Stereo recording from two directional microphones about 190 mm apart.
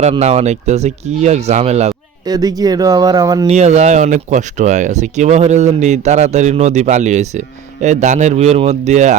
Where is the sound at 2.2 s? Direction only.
20° right (ahead or behind).